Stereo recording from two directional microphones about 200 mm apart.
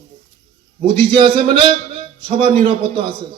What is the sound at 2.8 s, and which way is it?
Speech, 45° right (ahead or behind).